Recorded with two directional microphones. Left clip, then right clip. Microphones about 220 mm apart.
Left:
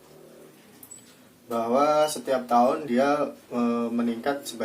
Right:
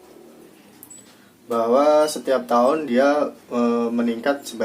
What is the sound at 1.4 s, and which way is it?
Speech, 40° right (ahead or behind).